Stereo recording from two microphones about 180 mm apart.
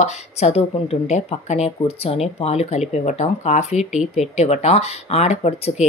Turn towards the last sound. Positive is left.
turn(degrees=35)  # may be behind; listen again after turning